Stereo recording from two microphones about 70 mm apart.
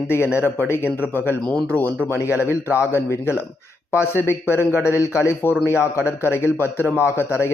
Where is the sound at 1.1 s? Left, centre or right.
Left.